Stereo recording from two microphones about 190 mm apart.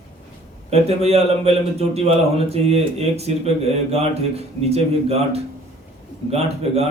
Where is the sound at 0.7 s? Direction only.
35° right (ahead or behind).